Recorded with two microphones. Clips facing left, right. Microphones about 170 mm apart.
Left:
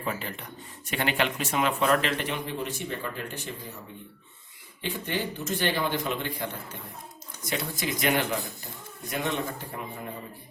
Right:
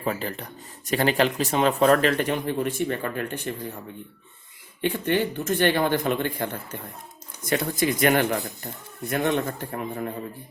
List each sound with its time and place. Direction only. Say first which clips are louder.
0.0 s speech: right 5 dB; 40° right (ahead or behind)
1.9 s a man's voice: right 6 dB; 50° right (ahead or behind)
4.8 s a man's voice: right 8 dB; 60° right (ahead or behind)